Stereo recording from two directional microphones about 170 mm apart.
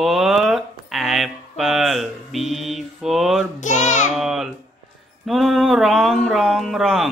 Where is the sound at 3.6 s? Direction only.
45° left (ahead or behind).